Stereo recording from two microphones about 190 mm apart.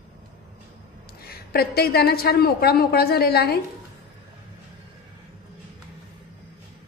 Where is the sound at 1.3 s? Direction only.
55° left (ahead or behind).